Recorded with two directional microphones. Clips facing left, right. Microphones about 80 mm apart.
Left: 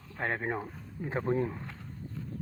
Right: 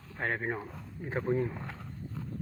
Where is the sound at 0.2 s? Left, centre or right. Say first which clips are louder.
Even; left.